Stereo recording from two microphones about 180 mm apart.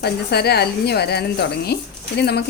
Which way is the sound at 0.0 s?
65° left (ahead or behind).